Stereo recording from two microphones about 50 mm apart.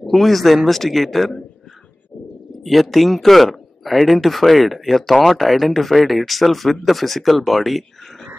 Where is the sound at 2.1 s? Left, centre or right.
Left.